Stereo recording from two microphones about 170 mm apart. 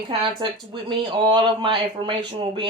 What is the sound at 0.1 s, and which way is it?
Speech, 30° right (ahead or behind).